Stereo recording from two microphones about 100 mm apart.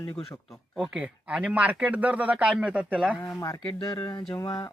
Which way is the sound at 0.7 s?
10° right (ahead or behind).